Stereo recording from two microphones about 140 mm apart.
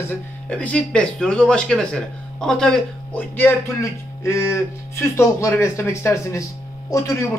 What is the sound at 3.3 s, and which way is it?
A man's voice, 15° left (ahead or behind).